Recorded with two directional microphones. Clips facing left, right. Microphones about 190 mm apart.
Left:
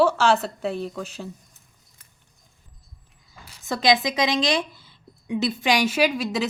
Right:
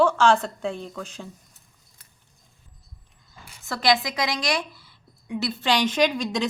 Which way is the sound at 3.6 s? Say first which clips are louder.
Left 2 dB; 20° left (ahead or behind).